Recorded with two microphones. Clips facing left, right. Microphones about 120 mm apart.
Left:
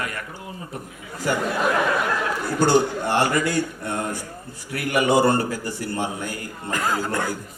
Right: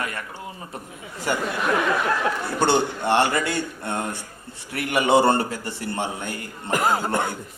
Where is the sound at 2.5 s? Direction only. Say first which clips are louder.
Left 4 dB; 25° right (ahead or behind).